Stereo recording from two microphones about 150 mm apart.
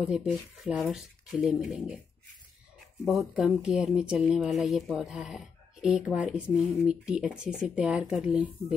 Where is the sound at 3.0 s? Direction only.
Centre (ahead or behind).